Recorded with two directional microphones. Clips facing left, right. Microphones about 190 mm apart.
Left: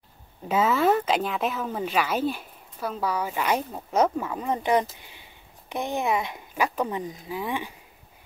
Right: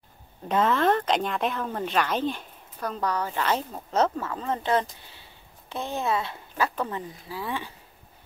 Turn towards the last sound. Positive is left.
turn(degrees=15)  # may be behind; listen again after turning